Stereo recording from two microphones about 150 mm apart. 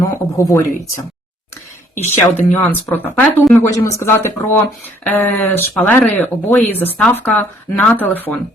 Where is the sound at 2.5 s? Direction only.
10° left (ahead or behind).